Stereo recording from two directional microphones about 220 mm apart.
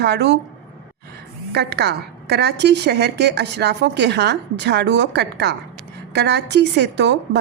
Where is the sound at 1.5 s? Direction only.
45° right (ahead or behind).